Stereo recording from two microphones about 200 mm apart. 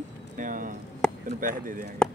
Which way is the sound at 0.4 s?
40° right (ahead or behind).